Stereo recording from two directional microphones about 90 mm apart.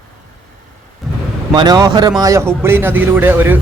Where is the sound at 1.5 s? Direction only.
50° right (ahead or behind).